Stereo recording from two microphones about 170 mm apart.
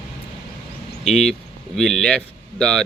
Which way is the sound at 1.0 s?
5° left (ahead or behind).